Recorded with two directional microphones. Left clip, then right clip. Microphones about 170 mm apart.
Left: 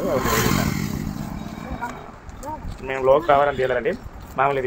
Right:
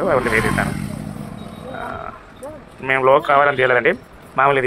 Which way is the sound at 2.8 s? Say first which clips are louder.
Right 3 dB; 20° right (ahead or behind).